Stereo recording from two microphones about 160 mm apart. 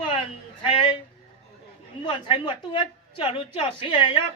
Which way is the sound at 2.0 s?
30° left (ahead or behind).